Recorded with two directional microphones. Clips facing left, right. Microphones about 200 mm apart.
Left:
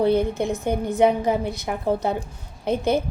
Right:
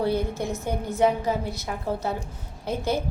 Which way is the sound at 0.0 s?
20° left (ahead or behind).